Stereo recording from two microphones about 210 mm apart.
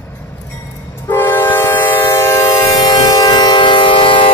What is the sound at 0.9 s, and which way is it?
Train, 10° left (ahead or behind).